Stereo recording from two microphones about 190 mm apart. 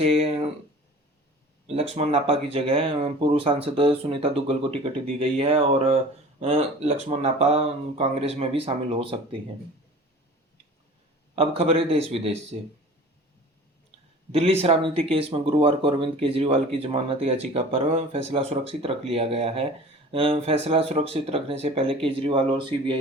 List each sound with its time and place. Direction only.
0.0 s speech: 35° right (ahead or behind)
1.6 s speech: 35° right (ahead or behind)
11.3 s speech: 30° right (ahead or behind)
14.3 s speech: 30° right (ahead or behind)